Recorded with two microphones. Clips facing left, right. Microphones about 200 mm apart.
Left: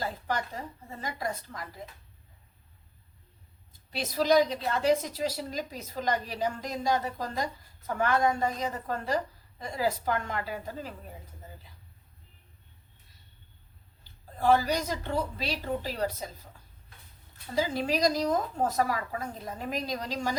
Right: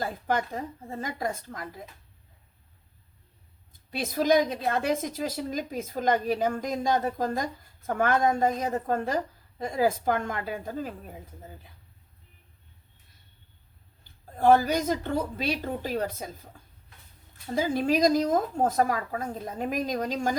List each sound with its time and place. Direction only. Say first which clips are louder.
0.0 s a woman's voice: right 4 dB; 50° right (ahead or behind)
3.7 s a woman's voice: right 3 dB; 50° right (ahead or behind)
14.0 s a woman's voice: right 5 dB; 50° right (ahead or behind)
17.5 s a woman's voice: right 4 dB; 50° right (ahead or behind)